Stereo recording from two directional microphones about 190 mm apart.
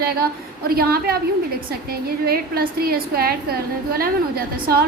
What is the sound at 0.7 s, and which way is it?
A woman's voice, 55° right (ahead or behind).